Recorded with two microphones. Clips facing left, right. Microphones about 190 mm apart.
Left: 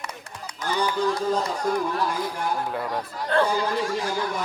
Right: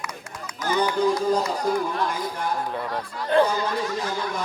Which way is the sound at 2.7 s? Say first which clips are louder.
Left 1 dB; 10° left (ahead or behind).